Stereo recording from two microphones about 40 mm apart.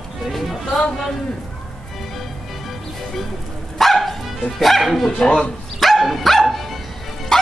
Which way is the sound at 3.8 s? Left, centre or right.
Centre.